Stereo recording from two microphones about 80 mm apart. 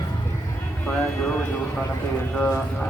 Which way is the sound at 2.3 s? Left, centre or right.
Left.